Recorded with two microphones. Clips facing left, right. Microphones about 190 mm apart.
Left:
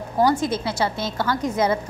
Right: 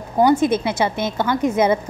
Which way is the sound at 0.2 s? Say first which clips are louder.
Right 5 dB; 20° right (ahead or behind).